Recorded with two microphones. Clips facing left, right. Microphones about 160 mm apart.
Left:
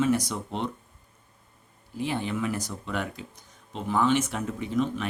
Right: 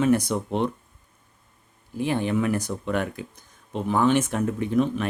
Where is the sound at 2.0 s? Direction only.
55° right (ahead or behind).